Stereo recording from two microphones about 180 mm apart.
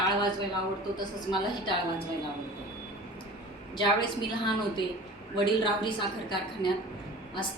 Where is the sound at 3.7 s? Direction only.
25° left (ahead or behind).